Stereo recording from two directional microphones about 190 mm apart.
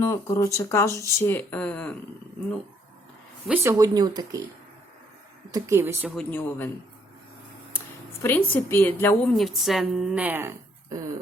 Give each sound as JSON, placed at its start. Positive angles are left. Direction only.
{"t": 0.0, "sound": "speech", "side_deg": 15}
{"t": 3.4, "sound": "speech", "side_deg": -10}
{"t": 5.5, "sound": "speech", "side_deg": -20}
{"t": 6.1, "sound": "speech", "side_deg": 10}
{"t": 8.2, "sound": "speech", "side_deg": 10}
{"t": 9.3, "sound": "a woman's voice", "side_deg": 0}